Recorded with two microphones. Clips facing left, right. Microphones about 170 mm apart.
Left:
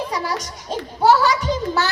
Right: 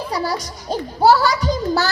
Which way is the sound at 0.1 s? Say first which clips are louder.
Right 2 dB; 35° right (ahead or behind).